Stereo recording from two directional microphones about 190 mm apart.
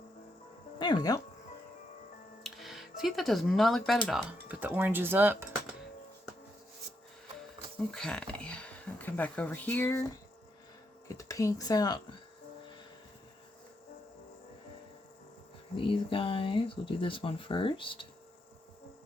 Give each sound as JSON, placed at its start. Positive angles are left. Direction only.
{"t": 0.8, "sound": "speech", "side_deg": 20}
{"t": 2.4, "sound": "a sound", "side_deg": 0}
{"t": 4.0, "sound": "speech", "side_deg": 0}
{"t": 7.9, "sound": "speech", "side_deg": 5}
{"t": 11.2, "sound": "speech", "side_deg": 15}
{"t": 15.7, "sound": "speech", "side_deg": 25}